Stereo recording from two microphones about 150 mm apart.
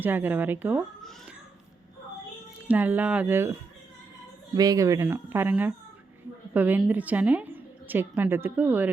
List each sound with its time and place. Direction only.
0.0 s a woman's voice: 15° right (ahead or behind)
2.6 s a woman's voice: 10° right (ahead or behind)
4.5 s a woman's voice: 25° right (ahead or behind)